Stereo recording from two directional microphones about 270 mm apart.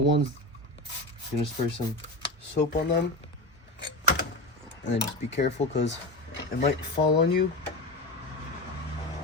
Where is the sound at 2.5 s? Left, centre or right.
Left.